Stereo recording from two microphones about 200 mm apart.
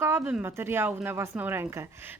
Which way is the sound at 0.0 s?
10° right (ahead or behind).